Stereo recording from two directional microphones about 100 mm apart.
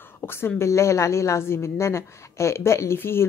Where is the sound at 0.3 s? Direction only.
25° left (ahead or behind).